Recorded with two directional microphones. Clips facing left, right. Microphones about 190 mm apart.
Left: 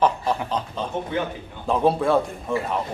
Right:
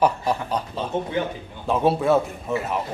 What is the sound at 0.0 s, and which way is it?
A man's voice, 10° right (ahead or behind).